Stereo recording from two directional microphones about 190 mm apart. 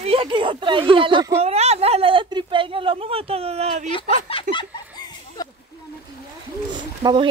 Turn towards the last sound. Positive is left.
turn(degrees=-25)  # may be behind; listen again after turning